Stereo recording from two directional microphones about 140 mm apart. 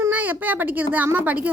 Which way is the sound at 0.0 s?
10° right (ahead or behind).